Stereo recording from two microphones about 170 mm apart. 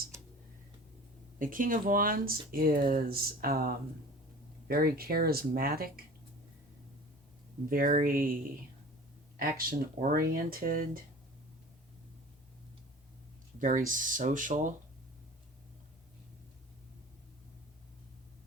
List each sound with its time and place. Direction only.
1.4 s speech: 55° right (ahead or behind)
7.7 s speech: 55° right (ahead or behind)
9.4 s speech: 60° right (ahead or behind)
13.6 s speech: 50° right (ahead or behind)